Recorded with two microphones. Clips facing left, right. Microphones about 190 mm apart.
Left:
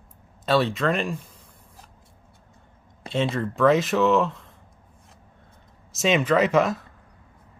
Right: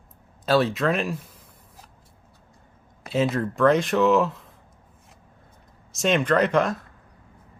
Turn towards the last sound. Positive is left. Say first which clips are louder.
# left 1 dB
turn(degrees=0)  # may be behind; listen again after turning